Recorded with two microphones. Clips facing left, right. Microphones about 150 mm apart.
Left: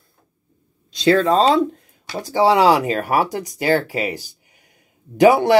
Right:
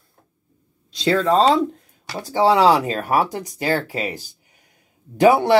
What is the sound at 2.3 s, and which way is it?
Speech, 15° left (ahead or behind).